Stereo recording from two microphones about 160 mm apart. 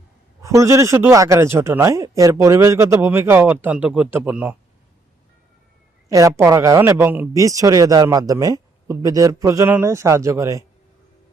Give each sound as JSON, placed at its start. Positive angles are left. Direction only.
{"t": 0.4, "sound": "speech", "side_deg": -20}
{"t": 6.1, "sound": "speech", "side_deg": -20}